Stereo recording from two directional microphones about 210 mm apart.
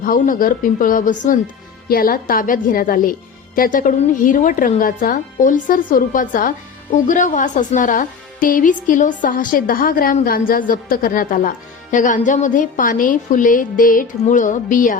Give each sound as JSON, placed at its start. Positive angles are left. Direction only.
{"t": 0.0, "sound": "a woman's voice", "side_deg": 40}